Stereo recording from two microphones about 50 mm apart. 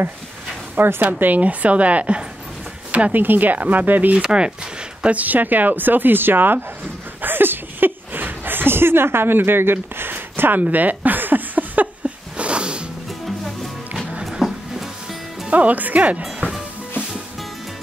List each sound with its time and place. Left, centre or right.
0.7 s speech: right
1.0 s a woman's voice: right
3.2 s speech: right
4.2 s a woman's voice: centre
5.0 s speech: right
7.2 s a sound: right
12.4 s music: right
14.4 s a sound: centre
15.5 s speech: right